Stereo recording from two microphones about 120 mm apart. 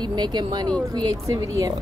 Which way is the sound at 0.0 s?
35° right (ahead or behind).